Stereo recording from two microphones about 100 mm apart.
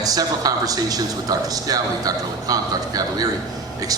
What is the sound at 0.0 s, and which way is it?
A man's voice, 40° right (ahead or behind).